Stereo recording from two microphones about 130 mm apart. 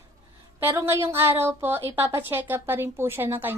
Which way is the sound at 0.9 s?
20° right (ahead or behind).